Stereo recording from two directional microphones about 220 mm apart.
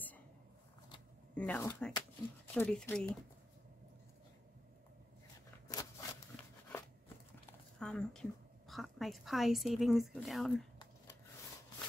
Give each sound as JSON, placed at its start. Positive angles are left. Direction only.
{"t": 1.3, "sound": "a woman's voice", "side_deg": 5}
{"t": 5.7, "sound": "a sound", "side_deg": 15}
{"t": 7.8, "sound": "a woman's voice", "side_deg": 5}